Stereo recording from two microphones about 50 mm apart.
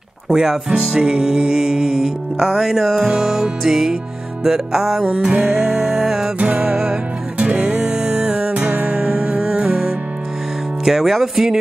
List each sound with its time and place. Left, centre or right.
0.3 s music: centre
5.1 s music: right
5.8 s music: centre
6.3 s music: right
10.9 s music: centre